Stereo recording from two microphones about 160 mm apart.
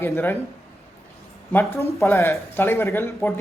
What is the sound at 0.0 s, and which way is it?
Speech, 10° left (ahead or behind).